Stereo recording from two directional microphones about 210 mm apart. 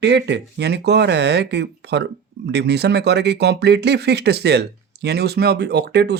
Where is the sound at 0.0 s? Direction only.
55° right (ahead or behind).